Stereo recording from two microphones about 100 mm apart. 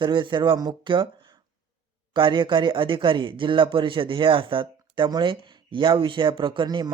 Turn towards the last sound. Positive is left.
turn(degrees=-50)  # may be behind; listen again after turning